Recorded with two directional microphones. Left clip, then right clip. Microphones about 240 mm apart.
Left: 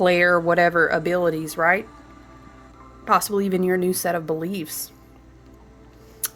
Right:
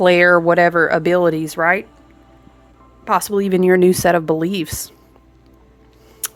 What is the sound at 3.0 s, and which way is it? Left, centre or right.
Speech, right.